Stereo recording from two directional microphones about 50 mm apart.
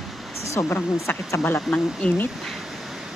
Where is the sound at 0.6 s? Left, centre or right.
Left.